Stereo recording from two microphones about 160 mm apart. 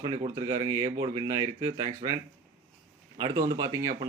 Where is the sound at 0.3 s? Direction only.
20° right (ahead or behind).